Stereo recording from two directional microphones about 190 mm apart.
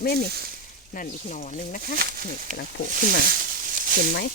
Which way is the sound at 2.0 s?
50° right (ahead or behind).